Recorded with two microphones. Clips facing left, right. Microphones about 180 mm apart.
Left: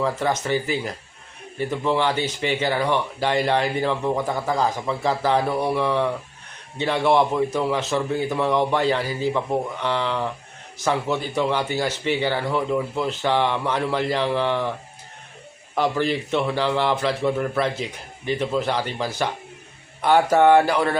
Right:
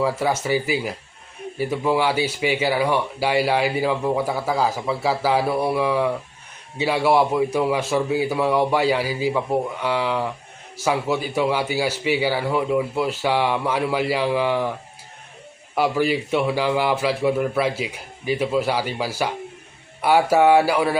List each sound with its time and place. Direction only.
0.0 s speech: 10° right (ahead or behind)
15.7 s speech: 10° right (ahead or behind)